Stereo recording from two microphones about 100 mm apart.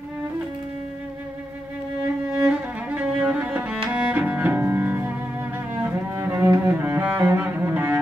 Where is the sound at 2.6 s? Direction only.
15° right (ahead or behind).